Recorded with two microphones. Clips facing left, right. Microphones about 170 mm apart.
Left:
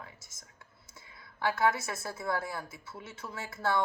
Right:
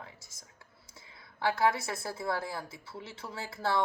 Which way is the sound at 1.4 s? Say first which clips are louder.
Right 1 dB; 25° right (ahead or behind).